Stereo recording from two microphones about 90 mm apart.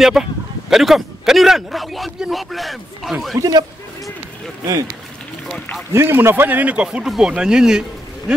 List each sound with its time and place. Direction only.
0.0 s a man's voice: 5° right (ahead or behind)
3.3 s a man's voice: 45° right (ahead or behind)
5.9 s a man's voice: 25° right (ahead or behind); by 7.8 s 10° right (ahead or behind)